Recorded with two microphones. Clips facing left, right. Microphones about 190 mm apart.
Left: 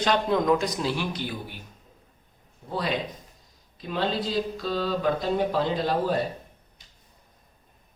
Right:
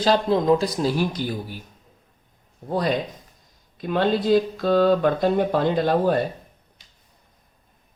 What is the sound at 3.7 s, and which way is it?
Speech, 55° right (ahead or behind).